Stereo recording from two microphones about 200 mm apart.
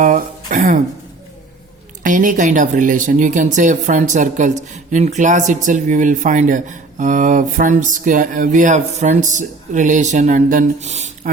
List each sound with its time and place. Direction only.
0.0 s throat clearing: 40° right (ahead or behind)
2.0 s speech: 40° right (ahead or behind)